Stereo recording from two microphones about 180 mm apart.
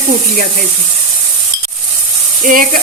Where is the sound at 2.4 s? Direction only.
50° right (ahead or behind).